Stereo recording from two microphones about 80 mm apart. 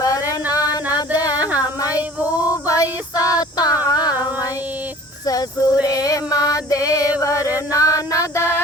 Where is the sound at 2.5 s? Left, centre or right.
Left.